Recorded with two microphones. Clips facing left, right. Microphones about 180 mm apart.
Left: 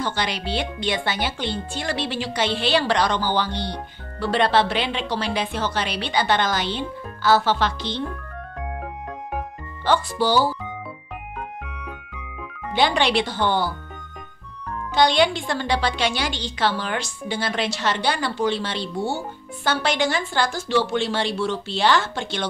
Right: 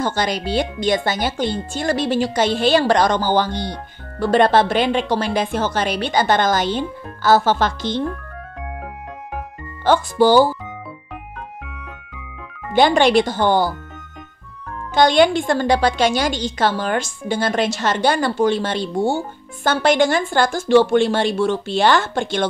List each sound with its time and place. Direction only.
0.0 s a woman's voice: 45° right (ahead or behind)
9.8 s a woman's voice: 50° right (ahead or behind)
12.7 s a woman's voice: 45° right (ahead or behind)
15.0 s a woman's voice: 50° right (ahead or behind)